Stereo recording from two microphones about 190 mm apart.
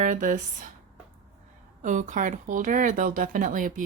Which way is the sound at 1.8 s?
40° right (ahead or behind).